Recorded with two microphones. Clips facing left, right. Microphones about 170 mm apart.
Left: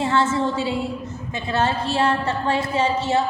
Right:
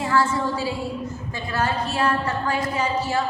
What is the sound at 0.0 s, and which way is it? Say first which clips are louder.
A woman's voice: left 2 dB; 25° left (ahead or behind).